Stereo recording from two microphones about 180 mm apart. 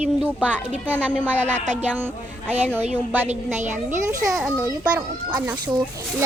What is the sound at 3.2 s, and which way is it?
Speech, 40° right (ahead or behind).